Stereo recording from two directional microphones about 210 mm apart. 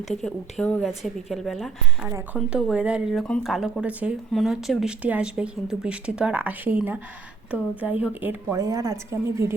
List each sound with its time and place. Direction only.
0.1 s a woman's voice: centre (ahead or behind)